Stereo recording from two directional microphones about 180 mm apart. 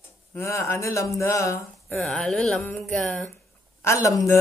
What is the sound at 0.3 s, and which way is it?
Speech, 15° left (ahead or behind).